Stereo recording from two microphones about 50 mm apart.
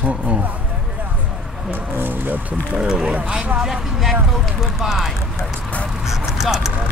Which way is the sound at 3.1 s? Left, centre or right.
Right.